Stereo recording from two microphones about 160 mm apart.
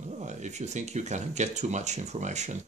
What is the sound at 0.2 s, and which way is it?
Speech, 45° right (ahead or behind).